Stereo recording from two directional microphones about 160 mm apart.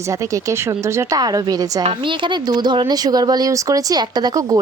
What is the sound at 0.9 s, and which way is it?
Speech, 20° right (ahead or behind).